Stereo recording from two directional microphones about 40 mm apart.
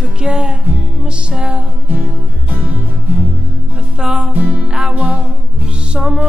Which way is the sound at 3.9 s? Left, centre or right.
Right.